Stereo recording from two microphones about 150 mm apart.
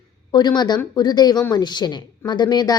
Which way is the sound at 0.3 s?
30° left (ahead or behind).